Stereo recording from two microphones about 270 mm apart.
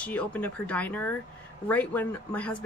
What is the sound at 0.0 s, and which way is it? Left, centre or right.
Speech, centre.